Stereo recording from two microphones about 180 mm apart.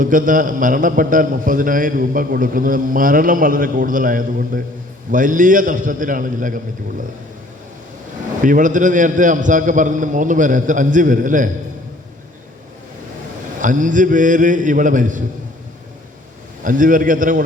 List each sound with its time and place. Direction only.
0.0 s a man's voice: 50° right (ahead or behind)
8.4 s a man's voice: 45° right (ahead or behind)
13.6 s a man's voice: 45° right (ahead or behind)
16.6 s a man's voice: 45° right (ahead or behind)